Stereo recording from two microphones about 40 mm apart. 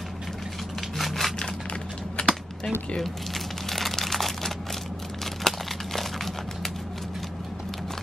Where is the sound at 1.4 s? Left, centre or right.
Left.